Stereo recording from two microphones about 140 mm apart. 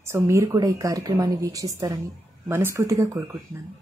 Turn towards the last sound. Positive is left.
turn(degrees=-25)  # may be behind; listen again after turning